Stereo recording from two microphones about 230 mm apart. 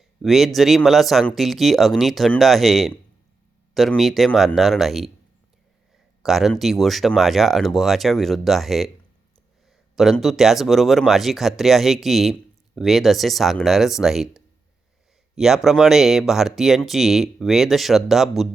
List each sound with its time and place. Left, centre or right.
0.2 s speech: centre
6.2 s speech: centre
9.9 s speech: centre